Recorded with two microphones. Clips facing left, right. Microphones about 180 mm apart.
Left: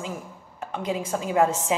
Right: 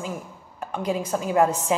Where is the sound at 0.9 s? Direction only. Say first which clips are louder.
Right 2 dB; 35° right (ahead or behind).